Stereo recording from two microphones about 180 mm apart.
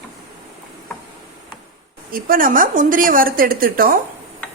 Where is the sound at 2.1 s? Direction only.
50° right (ahead or behind).